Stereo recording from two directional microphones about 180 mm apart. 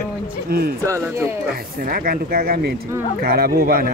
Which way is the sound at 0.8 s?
15° right (ahead or behind).